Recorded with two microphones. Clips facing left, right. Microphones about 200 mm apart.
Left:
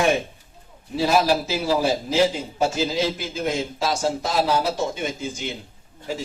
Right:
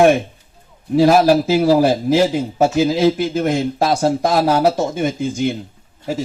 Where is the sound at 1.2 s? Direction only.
45° right (ahead or behind).